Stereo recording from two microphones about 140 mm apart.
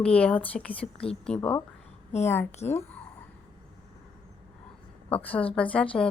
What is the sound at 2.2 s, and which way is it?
Speech, 15° left (ahead or behind).